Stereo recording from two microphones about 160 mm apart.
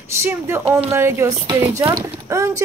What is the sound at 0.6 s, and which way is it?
Speech, 40° right (ahead or behind).